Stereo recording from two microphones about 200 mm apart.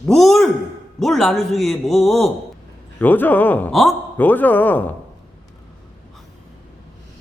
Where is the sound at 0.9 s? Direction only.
Centre (ahead or behind).